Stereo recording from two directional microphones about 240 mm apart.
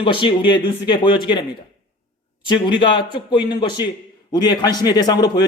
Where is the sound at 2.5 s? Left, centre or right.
Centre.